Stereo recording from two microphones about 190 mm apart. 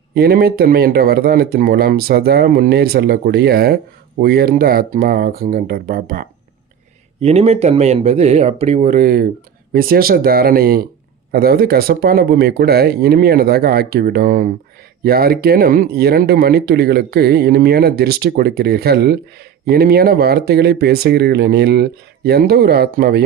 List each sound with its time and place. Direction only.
0.1 s speech: 55° right (ahead or behind)
7.2 s speech: 35° right (ahead or behind); by 23.2 s 55° right (ahead or behind)